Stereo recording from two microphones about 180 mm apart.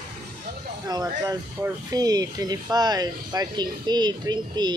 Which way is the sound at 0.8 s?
20° right (ahead or behind).